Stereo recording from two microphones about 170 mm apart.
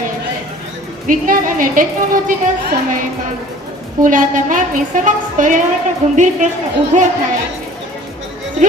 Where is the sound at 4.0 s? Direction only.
50° right (ahead or behind).